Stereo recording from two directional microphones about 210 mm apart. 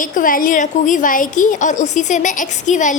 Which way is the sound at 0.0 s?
40° left (ahead or behind).